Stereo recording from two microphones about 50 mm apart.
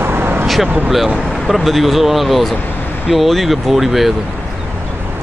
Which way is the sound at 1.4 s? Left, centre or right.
Centre.